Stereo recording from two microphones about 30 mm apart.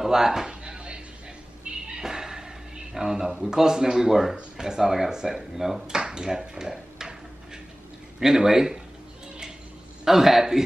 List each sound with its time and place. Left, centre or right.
0.0 s speech: centre
0.5 s a sound: right
2.9 s speech: centre
5.9 s speech: right
8.2 s speech: centre
10.0 s speech: centre